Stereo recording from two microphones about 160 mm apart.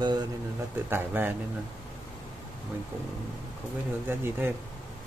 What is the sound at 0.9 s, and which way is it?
Speech, 15° right (ahead or behind).